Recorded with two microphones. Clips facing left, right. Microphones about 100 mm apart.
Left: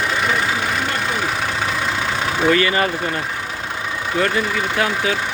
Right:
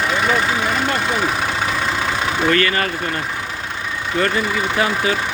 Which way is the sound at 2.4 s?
15° left (ahead or behind).